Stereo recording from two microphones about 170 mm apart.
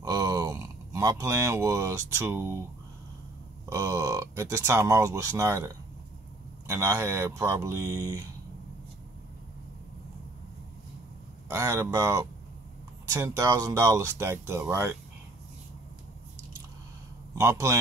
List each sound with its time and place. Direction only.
0.0 s a sound: 20° right (ahead or behind)
3.6 s speech: 20° right (ahead or behind)
6.7 s speech: 20° right (ahead or behind)
11.4 s speech: 15° right (ahead or behind)
17.4 s speech: 15° right (ahead or behind)